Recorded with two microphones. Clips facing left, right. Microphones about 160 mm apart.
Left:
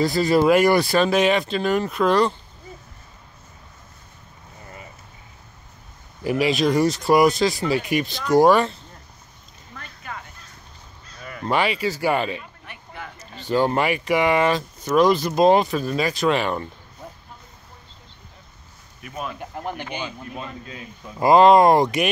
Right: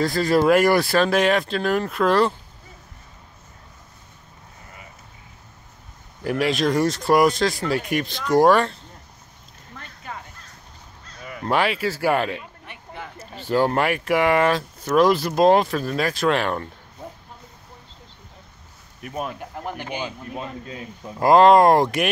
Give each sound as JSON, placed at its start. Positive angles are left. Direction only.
{"t": 0.0, "sound": "speech", "side_deg": 0}
{"t": 6.2, "sound": "speech", "side_deg": 0}
{"t": 10.1, "sound": "a sound", "side_deg": -30}
{"t": 11.4, "sound": "speech", "side_deg": 0}
{"t": 12.6, "sound": "a sound", "side_deg": -25}
{"t": 13.4, "sound": "speech", "side_deg": -5}
{"t": 19.0, "sound": "speech", "side_deg": -45}
{"t": 19.5, "sound": "speech", "side_deg": -5}